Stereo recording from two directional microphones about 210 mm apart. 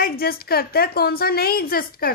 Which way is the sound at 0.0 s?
45° left (ahead or behind).